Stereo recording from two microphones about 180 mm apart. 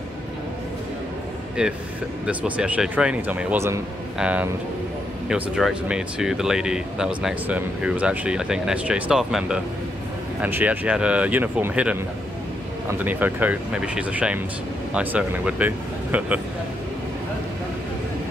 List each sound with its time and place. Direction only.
1.6 s speech: 5° right (ahead or behind)
13.0 s speech: 10° right (ahead or behind)